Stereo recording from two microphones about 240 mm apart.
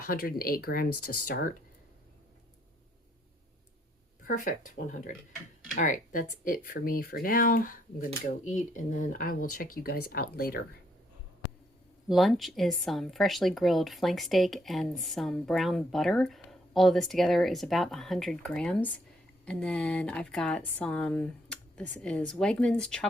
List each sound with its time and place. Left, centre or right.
0.0 s speech: left
4.3 s speech: left
12.0 s a woman's voice: centre